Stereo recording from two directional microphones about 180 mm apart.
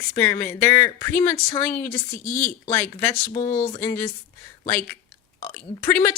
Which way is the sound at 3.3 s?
45° left (ahead or behind).